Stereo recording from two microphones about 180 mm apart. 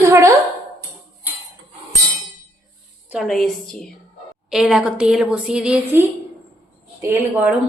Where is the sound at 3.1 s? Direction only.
Centre (ahead or behind).